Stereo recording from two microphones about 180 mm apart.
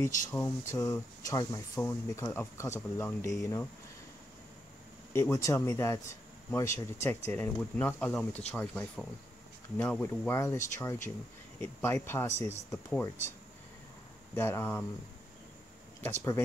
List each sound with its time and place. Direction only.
0.3 s speech: 15° left (ahead or behind)
5.1 s speech: 15° left (ahead or behind)
14.3 s speech: 15° left (ahead or behind)
16.0 s speech: 15° left (ahead or behind)